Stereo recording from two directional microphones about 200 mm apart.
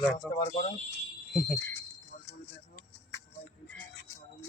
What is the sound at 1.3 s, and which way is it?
Speech, centre (ahead or behind).